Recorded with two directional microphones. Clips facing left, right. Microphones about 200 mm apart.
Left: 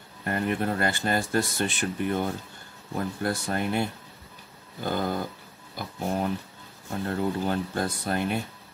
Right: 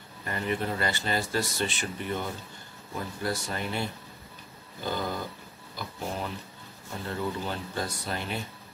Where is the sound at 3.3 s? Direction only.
55° left (ahead or behind).